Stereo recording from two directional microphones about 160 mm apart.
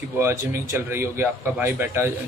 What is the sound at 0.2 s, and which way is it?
A man's voice, 15° right (ahead or behind).